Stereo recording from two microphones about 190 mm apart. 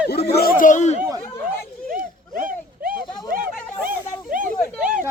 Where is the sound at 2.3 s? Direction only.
45° right (ahead or behind).